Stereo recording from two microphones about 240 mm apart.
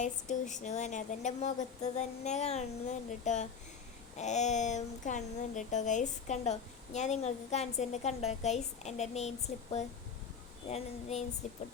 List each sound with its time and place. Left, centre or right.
0.0 s speech: left
10.7 s speech: left